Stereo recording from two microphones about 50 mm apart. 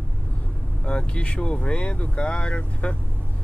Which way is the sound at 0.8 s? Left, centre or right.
Left.